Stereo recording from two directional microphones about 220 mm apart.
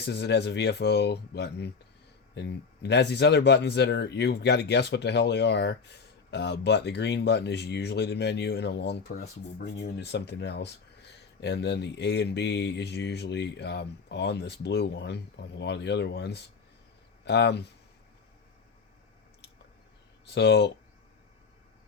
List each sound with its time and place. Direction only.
0.0 s speech: 50° left (ahead or behind)
20.2 s speech: 50° left (ahead or behind)